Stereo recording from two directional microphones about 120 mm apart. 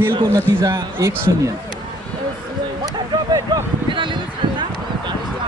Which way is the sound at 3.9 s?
40° right (ahead or behind).